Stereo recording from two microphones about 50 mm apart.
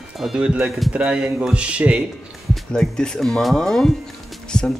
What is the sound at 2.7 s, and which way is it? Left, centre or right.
Speech, centre.